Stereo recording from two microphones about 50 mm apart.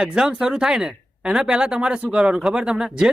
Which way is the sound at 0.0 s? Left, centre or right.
Centre.